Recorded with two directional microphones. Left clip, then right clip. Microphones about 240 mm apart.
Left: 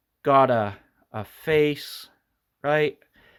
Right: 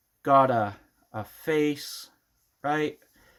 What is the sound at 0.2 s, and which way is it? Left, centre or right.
Speech, left.